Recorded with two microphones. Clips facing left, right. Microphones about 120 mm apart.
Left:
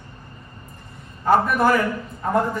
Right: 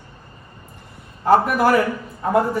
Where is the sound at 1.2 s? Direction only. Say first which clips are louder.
Right 2 dB; 5° right (ahead or behind).